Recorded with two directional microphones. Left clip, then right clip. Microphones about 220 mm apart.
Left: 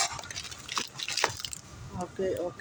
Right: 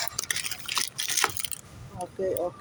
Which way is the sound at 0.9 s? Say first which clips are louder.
Even; 30° right (ahead or behind).